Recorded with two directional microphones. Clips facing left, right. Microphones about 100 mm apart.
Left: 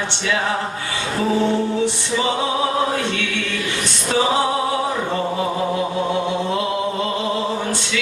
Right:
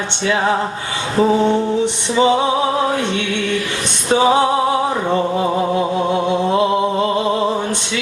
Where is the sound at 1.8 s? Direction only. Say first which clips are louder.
Right 5 dB; 20° right (ahead or behind).